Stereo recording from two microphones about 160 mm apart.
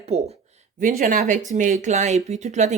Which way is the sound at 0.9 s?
60° right (ahead or behind).